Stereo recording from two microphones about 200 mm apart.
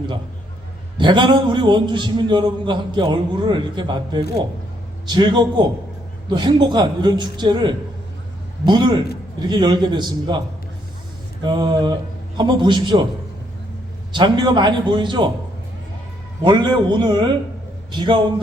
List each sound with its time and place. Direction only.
0.9 s a man's voice: 25° right (ahead or behind)
11.4 s a man's voice: 20° right (ahead or behind)
14.1 s a man's voice: 20° right (ahead or behind)
16.4 s a man's voice: 20° right (ahead or behind)